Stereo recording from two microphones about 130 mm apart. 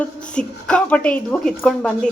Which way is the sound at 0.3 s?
10° left (ahead or behind).